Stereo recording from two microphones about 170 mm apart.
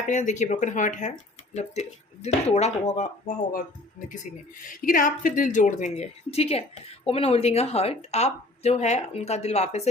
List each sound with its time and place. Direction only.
0.1 s speech: 45° left (ahead or behind)
2.2 s speech: 40° left (ahead or behind)
4.6 s speech: 55° left (ahead or behind)